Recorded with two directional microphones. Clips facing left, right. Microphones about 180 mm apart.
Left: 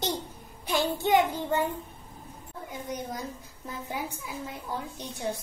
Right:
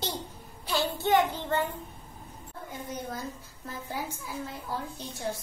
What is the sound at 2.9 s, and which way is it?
A woman's voice, 15° left (ahead or behind).